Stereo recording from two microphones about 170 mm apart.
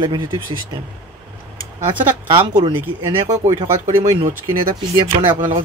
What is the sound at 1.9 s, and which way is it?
Speech, 30° right (ahead or behind).